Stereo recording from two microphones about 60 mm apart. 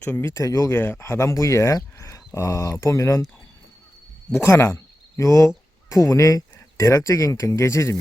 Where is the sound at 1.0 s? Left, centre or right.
Left.